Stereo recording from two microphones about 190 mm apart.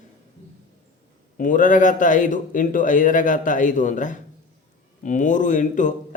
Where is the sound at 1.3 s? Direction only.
45° left (ahead or behind).